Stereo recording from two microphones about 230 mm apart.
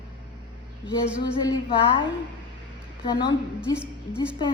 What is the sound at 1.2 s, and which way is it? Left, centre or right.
A woman's voice, centre.